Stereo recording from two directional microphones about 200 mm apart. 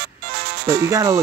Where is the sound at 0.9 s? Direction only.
15° right (ahead or behind).